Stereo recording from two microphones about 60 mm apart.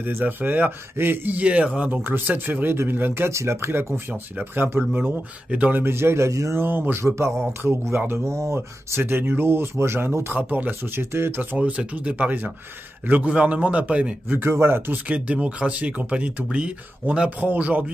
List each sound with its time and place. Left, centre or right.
0.0 s speech: right
2.0 s speech: right
3.3 s speech: right
4.1 s speech: right
6.6 s speech: right
7.0 s speech: right
10.3 s speech: right
11.5 s speech: right
14.3 s speech: right
15.0 s speech: right